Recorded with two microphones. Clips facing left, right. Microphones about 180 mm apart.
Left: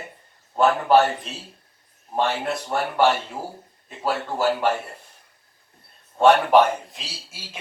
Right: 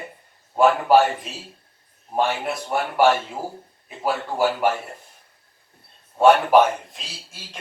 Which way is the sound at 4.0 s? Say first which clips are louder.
Right 1 dB; 10° right (ahead or behind).